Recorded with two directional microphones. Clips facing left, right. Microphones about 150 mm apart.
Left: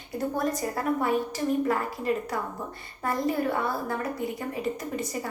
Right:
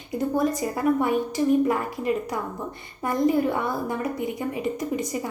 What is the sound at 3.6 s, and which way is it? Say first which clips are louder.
A woman's voice: right 2 dB; 15° right (ahead or behind).